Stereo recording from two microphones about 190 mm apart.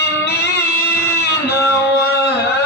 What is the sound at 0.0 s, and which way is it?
Music, 60° left (ahead or behind).